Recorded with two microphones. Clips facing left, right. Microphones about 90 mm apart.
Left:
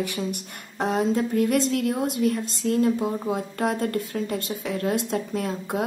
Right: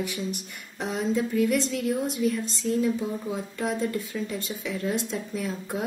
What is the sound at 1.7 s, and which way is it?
A woman's voice, 70° left (ahead or behind).